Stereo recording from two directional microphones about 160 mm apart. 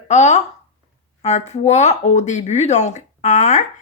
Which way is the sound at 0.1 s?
45° left (ahead or behind).